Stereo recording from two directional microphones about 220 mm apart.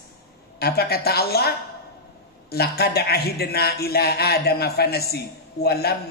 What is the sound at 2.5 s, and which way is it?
Speech, 45° left (ahead or behind).